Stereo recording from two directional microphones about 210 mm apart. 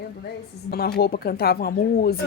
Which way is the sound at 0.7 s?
45° left (ahead or behind).